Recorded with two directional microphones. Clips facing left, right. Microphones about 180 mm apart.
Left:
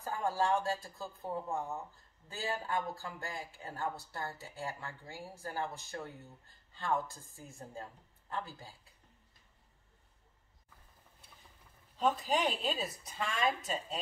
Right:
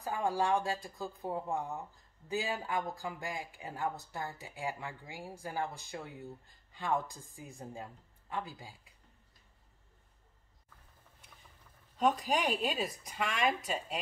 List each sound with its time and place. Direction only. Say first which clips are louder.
0.0 s speech: right 1 dB; 15° right (ahead or behind)
12.0 s speech: right 1 dB; 10° right (ahead or behind)